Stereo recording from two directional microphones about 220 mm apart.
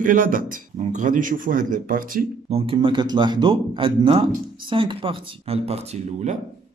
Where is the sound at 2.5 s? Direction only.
25° right (ahead or behind).